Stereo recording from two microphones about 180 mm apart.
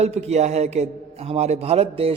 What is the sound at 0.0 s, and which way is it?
A man's voice, 35° right (ahead or behind).